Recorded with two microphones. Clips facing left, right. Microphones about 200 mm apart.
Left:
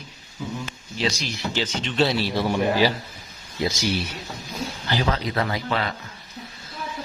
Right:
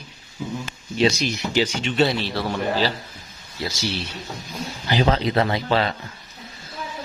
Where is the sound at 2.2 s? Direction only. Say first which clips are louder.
Left 2 dB; 10° left (ahead or behind).